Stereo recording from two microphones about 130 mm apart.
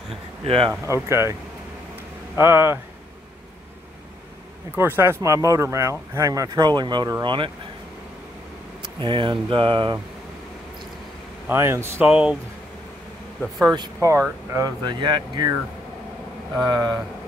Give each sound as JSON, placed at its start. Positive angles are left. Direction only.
{"t": 0.4, "sound": "speech", "side_deg": -45}
{"t": 0.7, "sound": "speech", "side_deg": -20}
{"t": 2.3, "sound": "speech", "side_deg": -20}
{"t": 4.7, "sound": "speech", "side_deg": -20}
{"t": 9.0, "sound": "speech", "side_deg": -40}
{"t": 11.4, "sound": "speech", "side_deg": -20}
{"t": 12.1, "sound": "speech", "side_deg": -5}
{"t": 13.9, "sound": "speech", "side_deg": -20}
{"t": 14.8, "sound": "speech", "side_deg": -35}
{"t": 16.5, "sound": "speech", "side_deg": -30}